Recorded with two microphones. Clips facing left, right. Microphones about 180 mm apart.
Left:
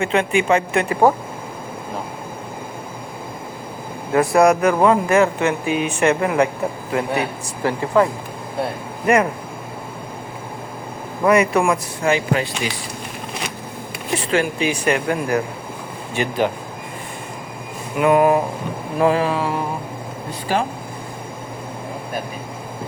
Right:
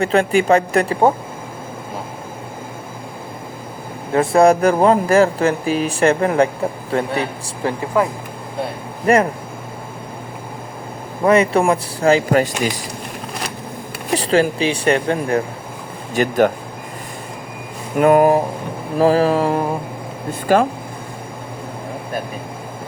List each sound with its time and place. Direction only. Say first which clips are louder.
0.0 s speech: right 3 dB; 35° right (ahead or behind)
4.1 s speech: right 2 dB; 25° right (ahead or behind)
9.1 s speech: right 2 dB; 30° right (ahead or behind)
11.3 s speech: right 2 dB; 30° right (ahead or behind)
14.1 s speech: right 4 dB; 35° right (ahead or behind)
16.1 s speech: right 5 dB; 45° right (ahead or behind)
17.9 s speech: right 3 dB; 45° right (ahead or behind)